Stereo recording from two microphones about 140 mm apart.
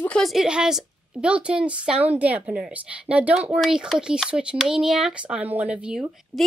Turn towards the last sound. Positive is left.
turn(degrees=-5)  # may be behind; listen again after turning